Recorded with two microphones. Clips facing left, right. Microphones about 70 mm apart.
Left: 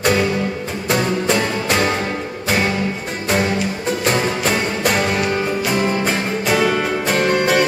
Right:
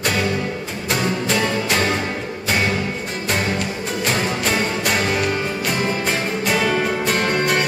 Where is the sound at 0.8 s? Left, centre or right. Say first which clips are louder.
Left 3 dB; centre.